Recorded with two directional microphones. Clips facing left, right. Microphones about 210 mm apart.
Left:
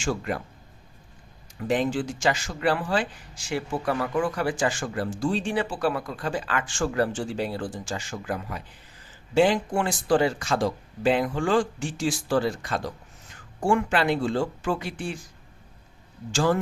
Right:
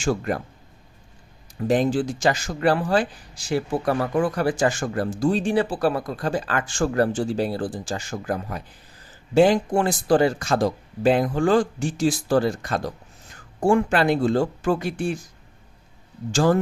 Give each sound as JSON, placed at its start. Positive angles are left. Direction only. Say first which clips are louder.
{"t": 0.0, "sound": "speech", "louder": "right 4 dB", "side_deg": -40}
{"t": 1.5, "sound": "speech", "louder": "right 4 dB", "side_deg": -40}
{"t": 16.3, "sound": "speech", "louder": "right 4 dB", "side_deg": -40}